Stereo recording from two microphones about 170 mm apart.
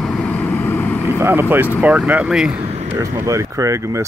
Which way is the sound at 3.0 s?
20° right (ahead or behind).